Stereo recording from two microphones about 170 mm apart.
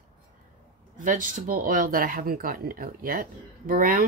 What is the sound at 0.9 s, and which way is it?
Speech, 55° right (ahead or behind).